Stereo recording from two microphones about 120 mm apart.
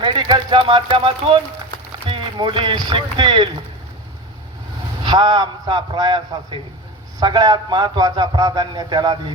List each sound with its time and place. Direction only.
0.0 s speech: 40° right (ahead or behind)
5.0 s a man's voice: 40° right (ahead or behind)